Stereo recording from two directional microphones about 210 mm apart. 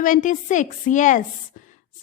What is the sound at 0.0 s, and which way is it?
A woman's voice, 40° left (ahead or behind).